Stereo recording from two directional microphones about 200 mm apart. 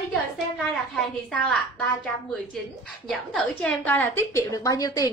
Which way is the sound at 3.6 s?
10° left (ahead or behind).